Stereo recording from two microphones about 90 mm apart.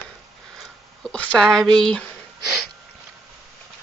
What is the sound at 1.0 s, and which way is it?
Speech, 15° left (ahead or behind).